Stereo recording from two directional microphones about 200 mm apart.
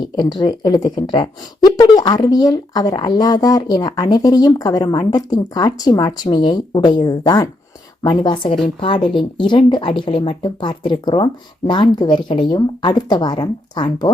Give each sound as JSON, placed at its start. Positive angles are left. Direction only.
{"t": 0.2, "sound": "speech", "side_deg": 20}